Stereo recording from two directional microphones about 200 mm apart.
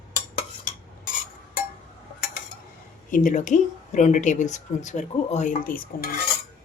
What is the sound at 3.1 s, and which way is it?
Speech, 40° left (ahead or behind).